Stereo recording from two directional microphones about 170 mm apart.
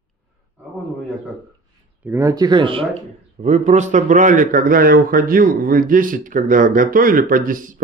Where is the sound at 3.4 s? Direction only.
45° right (ahead or behind).